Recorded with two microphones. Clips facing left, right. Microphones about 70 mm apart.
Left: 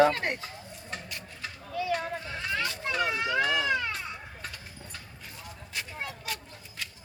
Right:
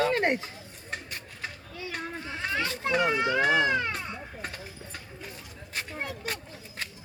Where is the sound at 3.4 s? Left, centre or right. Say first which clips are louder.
Right 2 dB; right.